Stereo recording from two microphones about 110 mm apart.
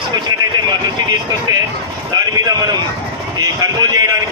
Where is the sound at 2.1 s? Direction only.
35° right (ahead or behind).